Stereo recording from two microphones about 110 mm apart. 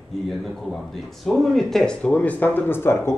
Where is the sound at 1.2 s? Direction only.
Centre (ahead or behind); by 3.2 s 20° left (ahead or behind).